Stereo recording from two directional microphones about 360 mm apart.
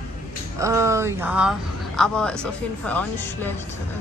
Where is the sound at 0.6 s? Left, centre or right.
Centre.